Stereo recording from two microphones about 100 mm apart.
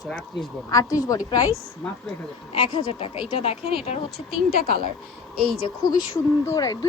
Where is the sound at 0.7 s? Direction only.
35° left (ahead or behind).